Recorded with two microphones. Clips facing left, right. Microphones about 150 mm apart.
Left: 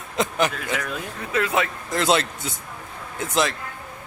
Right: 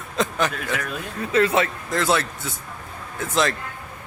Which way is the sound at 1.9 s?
20° left (ahead or behind).